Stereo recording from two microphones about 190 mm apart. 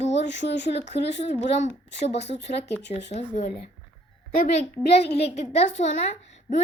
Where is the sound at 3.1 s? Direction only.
35° left (ahead or behind).